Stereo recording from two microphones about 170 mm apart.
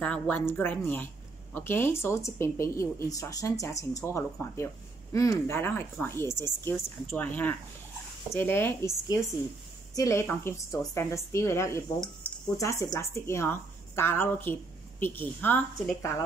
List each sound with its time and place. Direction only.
0.0 s a woman's voice: 10° left (ahead or behind)